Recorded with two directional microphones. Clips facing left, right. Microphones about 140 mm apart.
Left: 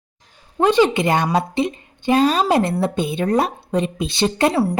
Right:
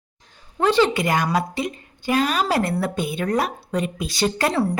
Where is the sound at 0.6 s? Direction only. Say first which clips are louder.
Left 3 dB; 20° left (ahead or behind).